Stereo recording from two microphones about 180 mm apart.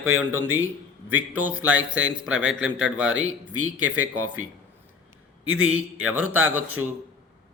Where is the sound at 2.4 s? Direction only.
90° right.